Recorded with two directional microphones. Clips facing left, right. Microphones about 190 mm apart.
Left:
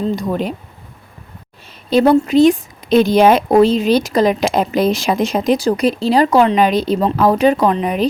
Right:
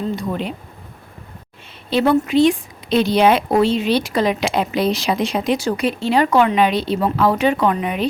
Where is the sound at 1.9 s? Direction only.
40° left (ahead or behind).